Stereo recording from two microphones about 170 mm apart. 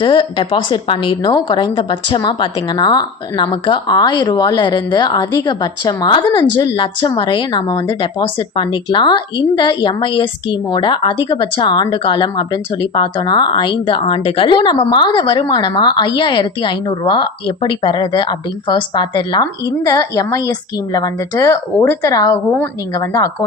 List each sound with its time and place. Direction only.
0.0 s speech: 30° left (ahead or behind)